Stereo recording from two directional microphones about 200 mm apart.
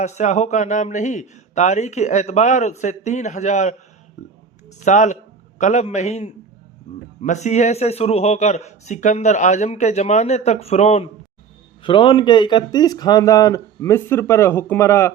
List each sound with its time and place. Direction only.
0.0 s speech: 35° left (ahead or behind)
4.8 s speech: 35° left (ahead or behind); by 15.1 s 15° left (ahead or behind)